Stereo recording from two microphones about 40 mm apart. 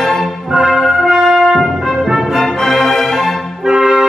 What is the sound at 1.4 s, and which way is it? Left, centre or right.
Brass instrument, centre.